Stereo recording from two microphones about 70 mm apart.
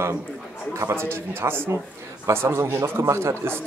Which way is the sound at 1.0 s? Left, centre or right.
Right.